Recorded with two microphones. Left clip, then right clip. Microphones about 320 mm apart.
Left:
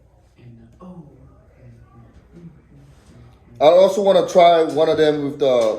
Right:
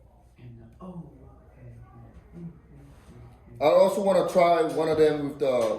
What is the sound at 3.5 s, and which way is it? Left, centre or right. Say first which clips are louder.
A man's voice: left 8 dB; centre.